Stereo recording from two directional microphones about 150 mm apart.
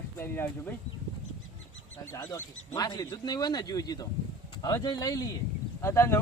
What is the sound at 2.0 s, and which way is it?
Speech, 20° left (ahead or behind).